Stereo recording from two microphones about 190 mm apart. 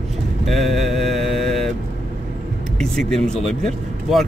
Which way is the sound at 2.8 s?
5° left (ahead or behind).